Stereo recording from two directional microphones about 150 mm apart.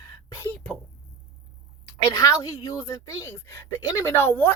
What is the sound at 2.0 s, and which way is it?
A woman's voice, 20° left (ahead or behind).